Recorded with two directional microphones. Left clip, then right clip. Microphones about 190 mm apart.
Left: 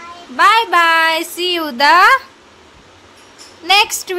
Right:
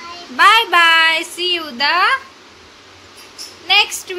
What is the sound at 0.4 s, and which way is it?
Speech, 20° left (ahead or behind).